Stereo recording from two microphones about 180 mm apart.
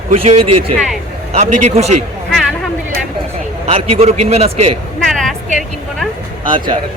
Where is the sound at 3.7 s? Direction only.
35° right (ahead or behind).